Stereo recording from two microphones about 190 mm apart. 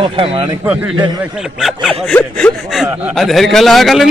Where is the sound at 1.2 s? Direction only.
5° right (ahead or behind).